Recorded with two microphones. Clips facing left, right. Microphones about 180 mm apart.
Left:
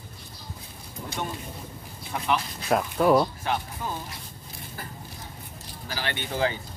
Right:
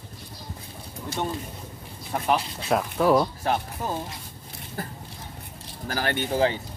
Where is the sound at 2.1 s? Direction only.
40° right (ahead or behind).